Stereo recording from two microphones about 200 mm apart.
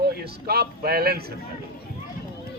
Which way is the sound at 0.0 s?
50° right (ahead or behind).